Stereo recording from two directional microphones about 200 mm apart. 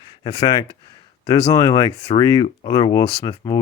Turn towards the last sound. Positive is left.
turn(degrees=20)  # may be behind; listen again after turning